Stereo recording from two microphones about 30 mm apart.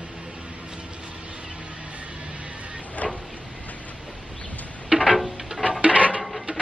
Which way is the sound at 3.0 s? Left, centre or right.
Left.